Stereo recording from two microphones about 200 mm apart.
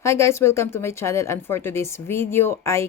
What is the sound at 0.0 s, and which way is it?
Speech, 15° left (ahead or behind).